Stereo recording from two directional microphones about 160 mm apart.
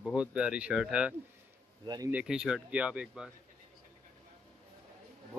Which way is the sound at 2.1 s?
5° right (ahead or behind).